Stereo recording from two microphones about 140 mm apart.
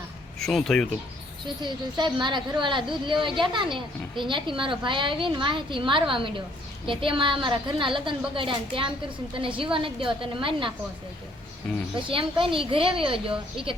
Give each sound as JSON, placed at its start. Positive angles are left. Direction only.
{"t": 0.3, "sound": "speech", "side_deg": 5}
{"t": 1.6, "sound": "a woman's voice", "side_deg": -35}
{"t": 12.0, "sound": "a woman's voice", "side_deg": -40}